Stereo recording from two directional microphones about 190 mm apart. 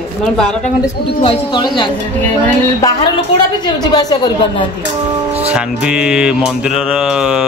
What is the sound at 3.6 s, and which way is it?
Speech, 20° left (ahead or behind).